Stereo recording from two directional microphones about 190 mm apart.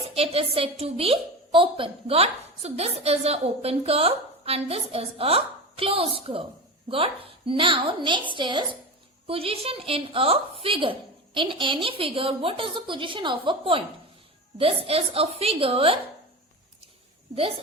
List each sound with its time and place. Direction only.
0.1 s a woman's voice: 30° right (ahead or behind)